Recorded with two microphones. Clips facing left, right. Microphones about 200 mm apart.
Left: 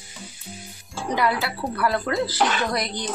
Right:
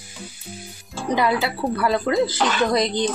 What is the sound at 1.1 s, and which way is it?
Speech, 20° right (ahead or behind).